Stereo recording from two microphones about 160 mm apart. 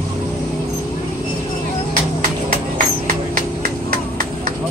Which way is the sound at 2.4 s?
65° right (ahead or behind).